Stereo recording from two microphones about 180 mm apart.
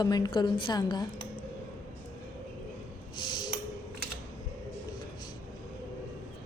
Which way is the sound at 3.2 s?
25° left (ahead or behind).